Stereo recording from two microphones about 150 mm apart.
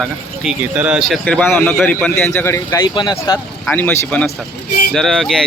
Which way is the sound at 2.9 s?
30° left (ahead or behind).